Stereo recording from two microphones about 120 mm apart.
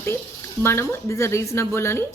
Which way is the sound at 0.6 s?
20° left (ahead or behind).